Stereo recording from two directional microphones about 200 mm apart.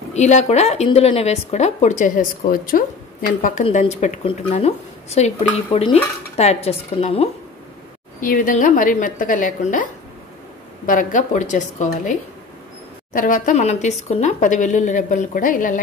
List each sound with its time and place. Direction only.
0.1 s a woman's voice: 35° left (ahead or behind)
8.2 s a woman's voice: 40° left (ahead or behind)
10.9 s a woman's voice: 40° left (ahead or behind)